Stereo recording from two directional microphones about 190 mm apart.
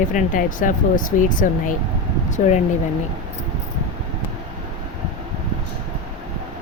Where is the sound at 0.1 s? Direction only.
45° left (ahead or behind).